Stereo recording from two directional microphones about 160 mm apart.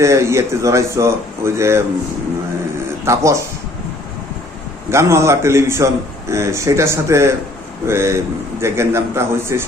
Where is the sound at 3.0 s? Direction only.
20° right (ahead or behind).